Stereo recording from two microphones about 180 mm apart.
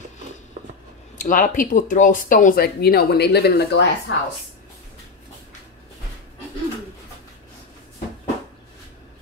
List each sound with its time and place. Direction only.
1.1 s speech: 45° left (ahead or behind); by 4.2 s 75° left (ahead or behind)